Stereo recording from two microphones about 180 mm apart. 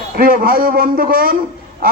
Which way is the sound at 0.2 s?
55° right (ahead or behind).